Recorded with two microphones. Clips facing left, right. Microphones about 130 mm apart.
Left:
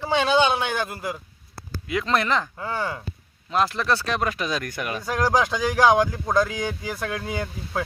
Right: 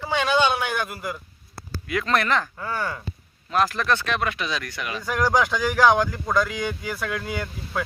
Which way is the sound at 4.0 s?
35° left (ahead or behind).